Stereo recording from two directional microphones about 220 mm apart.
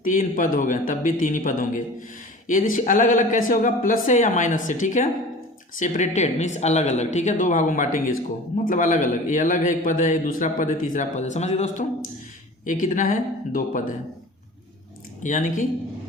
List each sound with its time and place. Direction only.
0.0 s a man's voice: 35° left (ahead or behind)
15.2 s a man's voice: 35° left (ahead or behind)